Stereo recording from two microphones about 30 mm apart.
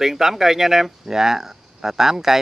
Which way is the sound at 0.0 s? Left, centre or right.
Centre.